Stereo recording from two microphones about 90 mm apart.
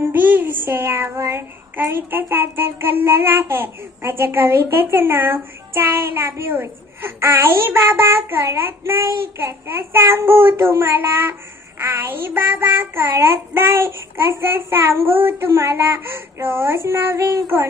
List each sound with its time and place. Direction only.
0.0 s child singing: 20° right (ahead or behind)